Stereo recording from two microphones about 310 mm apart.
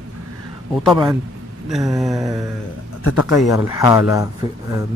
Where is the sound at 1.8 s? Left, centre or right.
Centre.